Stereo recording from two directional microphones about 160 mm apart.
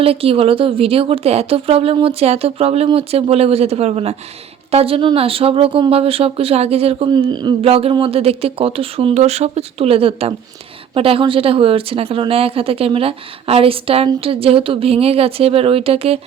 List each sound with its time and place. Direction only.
0.0 s a woman's voice: 35° right (ahead or behind)